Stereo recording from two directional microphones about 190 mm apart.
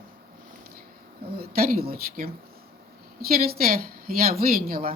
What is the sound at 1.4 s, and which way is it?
Speech, 50° right (ahead or behind).